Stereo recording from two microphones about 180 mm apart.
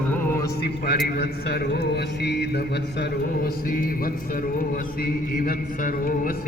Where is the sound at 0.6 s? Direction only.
60° left (ahead or behind).